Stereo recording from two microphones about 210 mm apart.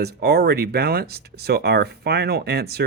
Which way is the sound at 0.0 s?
50° right (ahead or behind).